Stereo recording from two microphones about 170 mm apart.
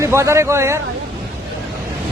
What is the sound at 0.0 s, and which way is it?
Speech, 15° right (ahead or behind).